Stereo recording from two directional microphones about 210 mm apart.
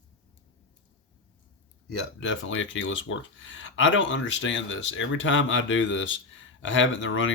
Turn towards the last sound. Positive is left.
turn(degrees=65)  # may be behind; listen again after turning